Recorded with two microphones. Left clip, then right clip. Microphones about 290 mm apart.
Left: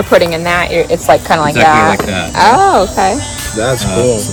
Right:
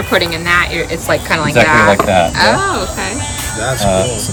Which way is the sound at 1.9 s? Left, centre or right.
Centre.